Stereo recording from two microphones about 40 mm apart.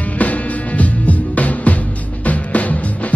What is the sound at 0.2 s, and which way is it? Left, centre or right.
Music, left.